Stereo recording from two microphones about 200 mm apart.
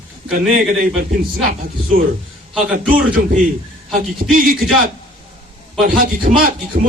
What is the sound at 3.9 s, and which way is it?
A man's voice, 45° right (ahead or behind).